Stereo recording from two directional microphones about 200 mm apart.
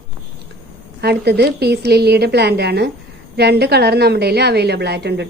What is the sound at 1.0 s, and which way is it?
A woman's voice, 55° right (ahead or behind).